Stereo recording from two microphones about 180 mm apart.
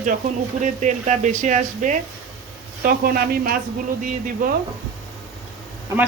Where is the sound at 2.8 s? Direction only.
55° right (ahead or behind).